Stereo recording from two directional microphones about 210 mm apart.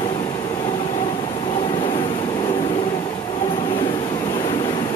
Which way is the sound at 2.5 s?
25° left (ahead or behind).